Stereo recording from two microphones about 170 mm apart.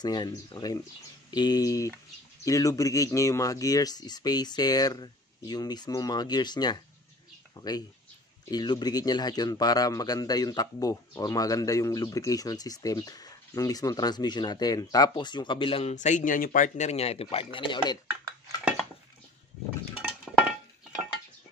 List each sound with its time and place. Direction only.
0.0 s speech: 25° left (ahead or behind)